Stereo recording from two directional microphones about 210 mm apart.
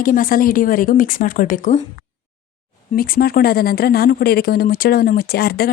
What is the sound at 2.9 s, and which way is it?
Speech, 45° left (ahead or behind).